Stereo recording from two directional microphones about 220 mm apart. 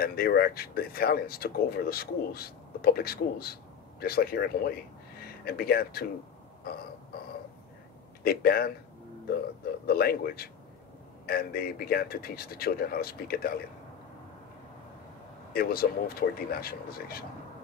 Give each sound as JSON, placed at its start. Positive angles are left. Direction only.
{"t": 0.0, "sound": "speech", "side_deg": 45}
{"t": 8.2, "sound": "speech", "side_deg": 45}
{"t": 9.8, "sound": "speech", "side_deg": 45}
{"t": 15.5, "sound": "speech", "side_deg": 40}